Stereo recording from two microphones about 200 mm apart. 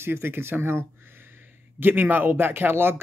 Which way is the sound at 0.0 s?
10° right (ahead or behind).